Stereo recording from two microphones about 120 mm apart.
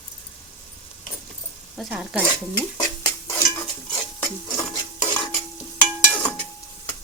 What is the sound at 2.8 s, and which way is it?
Stir, 30° left (ahead or behind).